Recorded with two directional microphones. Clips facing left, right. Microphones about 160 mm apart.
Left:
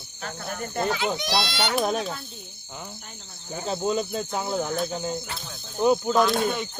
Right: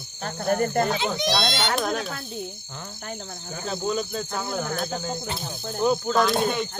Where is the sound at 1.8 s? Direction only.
20° left (ahead or behind).